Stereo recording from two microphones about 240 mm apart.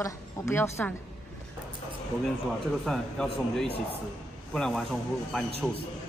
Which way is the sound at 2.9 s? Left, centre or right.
Centre.